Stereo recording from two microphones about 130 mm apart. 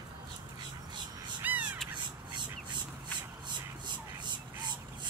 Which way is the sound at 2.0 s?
35° right (ahead or behind).